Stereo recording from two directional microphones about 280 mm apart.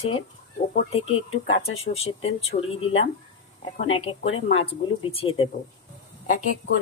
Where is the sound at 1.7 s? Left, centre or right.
Left.